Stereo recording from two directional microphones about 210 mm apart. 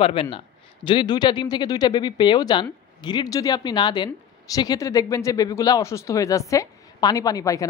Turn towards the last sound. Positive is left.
turn(degrees=15)  # may be behind; listen again after turning